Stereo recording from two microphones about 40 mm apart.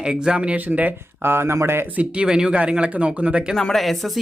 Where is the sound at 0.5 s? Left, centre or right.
Right.